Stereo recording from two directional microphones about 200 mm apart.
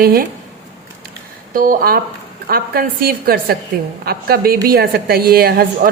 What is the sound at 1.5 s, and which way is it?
A woman's voice, 45° right (ahead or behind).